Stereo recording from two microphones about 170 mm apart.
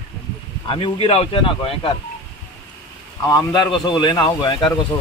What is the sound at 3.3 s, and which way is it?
Speech, 25° left (ahead or behind).